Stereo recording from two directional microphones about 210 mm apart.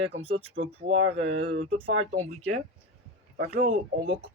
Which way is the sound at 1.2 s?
65° right (ahead or behind).